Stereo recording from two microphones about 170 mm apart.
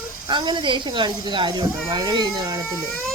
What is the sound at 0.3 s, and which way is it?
Speech, 25° right (ahead or behind).